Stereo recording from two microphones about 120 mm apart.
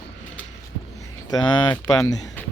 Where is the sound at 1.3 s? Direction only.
30° left (ahead or behind).